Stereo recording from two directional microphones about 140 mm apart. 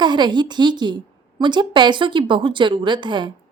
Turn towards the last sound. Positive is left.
turn(degrees=-35)  # may be behind; listen again after turning